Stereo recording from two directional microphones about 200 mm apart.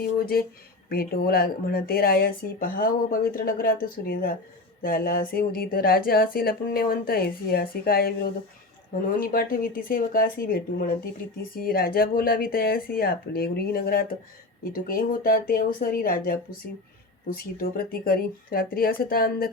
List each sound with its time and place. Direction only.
0.2 s speech: 50° left (ahead or behind)